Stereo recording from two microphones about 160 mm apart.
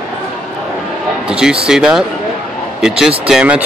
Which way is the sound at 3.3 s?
5° right (ahead or behind).